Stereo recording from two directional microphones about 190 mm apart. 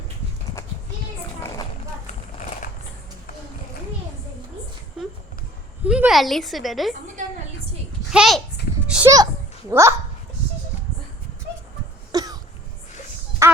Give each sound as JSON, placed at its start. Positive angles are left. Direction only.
{"t": 5.8, "sound": "a woman's voice", "side_deg": -5}
{"t": 8.1, "sound": "a woman's voice", "side_deg": -5}
{"t": 9.0, "sound": "a child's voice", "side_deg": -15}
{"t": 12.1, "sound": "cough", "side_deg": -20}
{"t": 13.4, "sound": "a sound", "side_deg": -15}